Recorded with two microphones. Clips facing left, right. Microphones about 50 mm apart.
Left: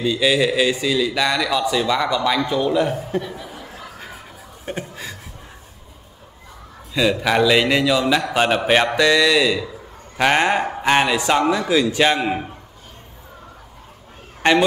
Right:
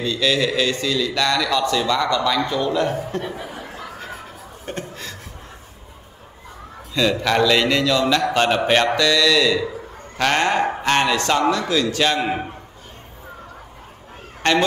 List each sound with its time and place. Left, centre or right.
0.0 s a man's voice: centre
4.6 s chuckle: centre
6.9 s a man's voice: centre
14.4 s a man's voice: centre